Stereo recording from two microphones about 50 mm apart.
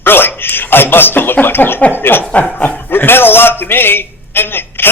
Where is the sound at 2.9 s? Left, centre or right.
Left.